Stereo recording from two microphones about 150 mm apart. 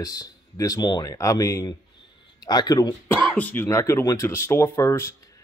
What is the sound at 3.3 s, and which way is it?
Speech, 10° left (ahead or behind).